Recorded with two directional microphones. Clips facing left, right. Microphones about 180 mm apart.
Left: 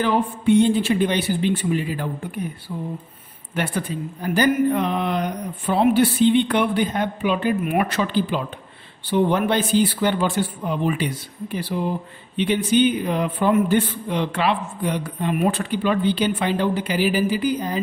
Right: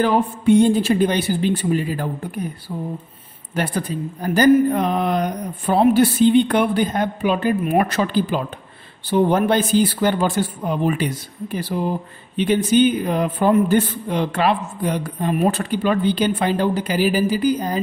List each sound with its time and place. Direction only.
0.0 s a man's voice: 45° right (ahead or behind)